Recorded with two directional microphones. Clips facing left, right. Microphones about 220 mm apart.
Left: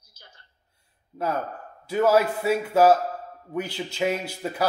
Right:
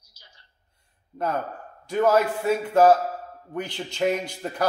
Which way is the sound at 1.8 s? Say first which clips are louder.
Even; 5° left (ahead or behind).